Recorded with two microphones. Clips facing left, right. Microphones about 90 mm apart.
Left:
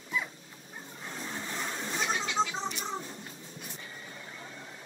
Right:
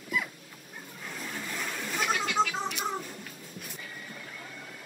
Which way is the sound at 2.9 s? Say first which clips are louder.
Right 2 dB; 25° left (ahead or behind).